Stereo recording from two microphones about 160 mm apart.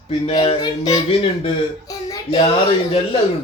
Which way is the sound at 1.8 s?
25° left (ahead or behind).